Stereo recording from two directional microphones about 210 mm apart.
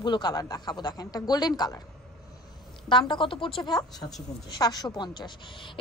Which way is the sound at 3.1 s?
25° left (ahead or behind).